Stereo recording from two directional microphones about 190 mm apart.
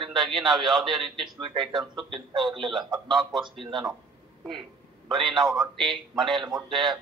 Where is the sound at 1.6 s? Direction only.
Centre (ahead or behind).